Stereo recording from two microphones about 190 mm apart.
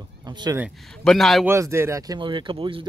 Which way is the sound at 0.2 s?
20° right (ahead or behind).